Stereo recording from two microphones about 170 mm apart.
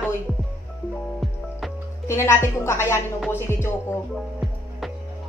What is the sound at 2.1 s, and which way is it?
A woman's voice, 15° left (ahead or behind).